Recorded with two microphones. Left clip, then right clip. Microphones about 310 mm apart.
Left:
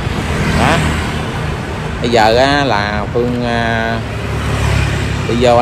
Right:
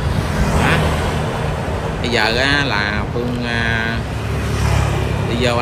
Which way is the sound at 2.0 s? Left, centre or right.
Centre.